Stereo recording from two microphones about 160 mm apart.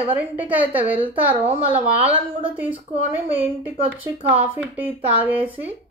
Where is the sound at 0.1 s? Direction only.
10° right (ahead or behind).